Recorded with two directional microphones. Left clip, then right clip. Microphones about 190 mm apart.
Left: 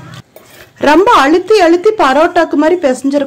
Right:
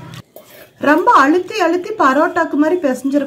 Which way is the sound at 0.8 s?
40° left (ahead or behind).